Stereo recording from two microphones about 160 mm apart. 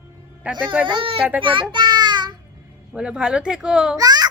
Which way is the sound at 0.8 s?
30° right (ahead or behind).